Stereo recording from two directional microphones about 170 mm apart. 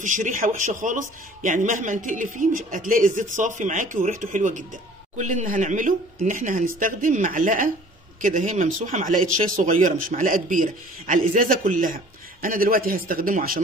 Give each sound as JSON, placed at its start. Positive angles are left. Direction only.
{"t": 0.0, "sound": "speech", "side_deg": -45}